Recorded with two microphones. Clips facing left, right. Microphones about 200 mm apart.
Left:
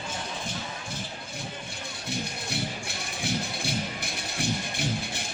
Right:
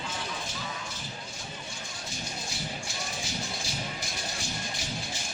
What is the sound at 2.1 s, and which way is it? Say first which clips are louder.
Music: left 8 dB; 60° left (ahead or behind).